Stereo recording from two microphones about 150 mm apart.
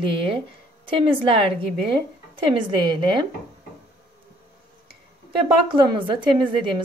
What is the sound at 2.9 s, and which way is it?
Speech, 35° right (ahead or behind).